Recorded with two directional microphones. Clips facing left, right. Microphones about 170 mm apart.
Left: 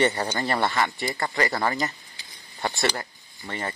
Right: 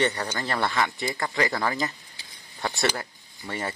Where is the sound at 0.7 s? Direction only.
Centre (ahead or behind).